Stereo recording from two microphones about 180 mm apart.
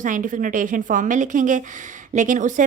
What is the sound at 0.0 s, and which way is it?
A woman's voice, 45° right (ahead or behind).